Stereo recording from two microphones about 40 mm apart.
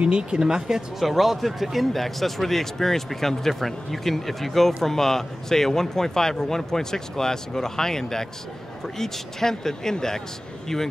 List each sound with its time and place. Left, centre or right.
0.0 s speech: right
0.4 s speech: centre
0.9 s speech: centre